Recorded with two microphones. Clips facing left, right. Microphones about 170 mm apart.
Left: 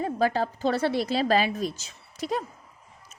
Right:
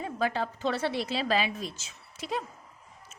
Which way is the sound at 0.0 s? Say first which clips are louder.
Left 5 dB; 40° left (ahead or behind).